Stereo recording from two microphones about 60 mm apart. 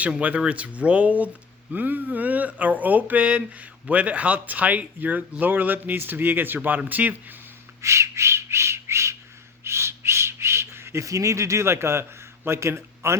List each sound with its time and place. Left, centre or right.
0.0 s speech: right
7.8 s whistling: right
12.5 s a man's voice: right